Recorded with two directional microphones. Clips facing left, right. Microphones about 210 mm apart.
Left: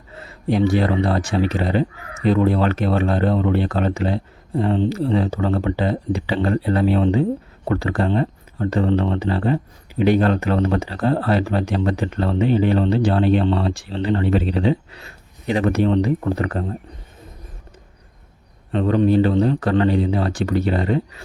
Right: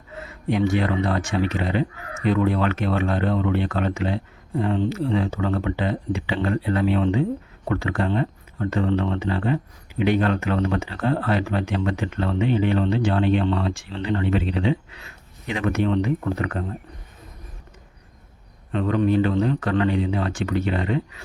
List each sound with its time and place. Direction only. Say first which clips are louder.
0.1 s speech: left 3 dB; 35° left (ahead or behind)
18.7 s speech: left 4 dB; 35° left (ahead or behind)